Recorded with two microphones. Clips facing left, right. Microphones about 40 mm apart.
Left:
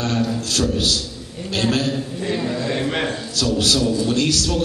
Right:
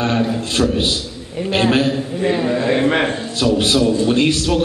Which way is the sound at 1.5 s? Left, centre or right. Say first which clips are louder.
Right 5 dB; right.